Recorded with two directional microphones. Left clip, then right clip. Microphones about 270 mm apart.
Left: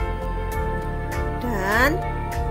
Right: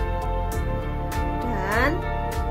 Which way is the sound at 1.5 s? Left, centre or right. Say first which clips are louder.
Left 4 dB; left.